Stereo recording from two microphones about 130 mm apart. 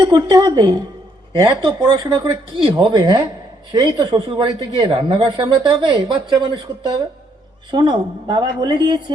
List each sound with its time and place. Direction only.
0.0 s speech: 35° right (ahead or behind)